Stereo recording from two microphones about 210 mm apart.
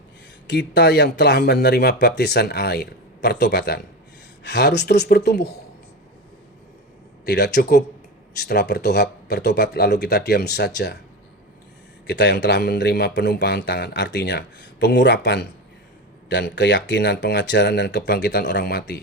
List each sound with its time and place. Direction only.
0.4 s a man's voice: 55° left (ahead or behind)
7.3 s a man's voice: 50° left (ahead or behind)
12.0 s a man's voice: 55° left (ahead or behind)